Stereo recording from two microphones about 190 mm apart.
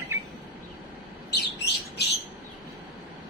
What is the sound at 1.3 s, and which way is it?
Bird, 60° left (ahead or behind).